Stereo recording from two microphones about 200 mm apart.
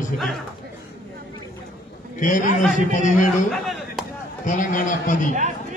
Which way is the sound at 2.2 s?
40° left (ahead or behind).